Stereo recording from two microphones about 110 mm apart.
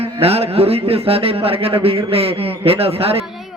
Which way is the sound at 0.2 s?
65° right (ahead or behind).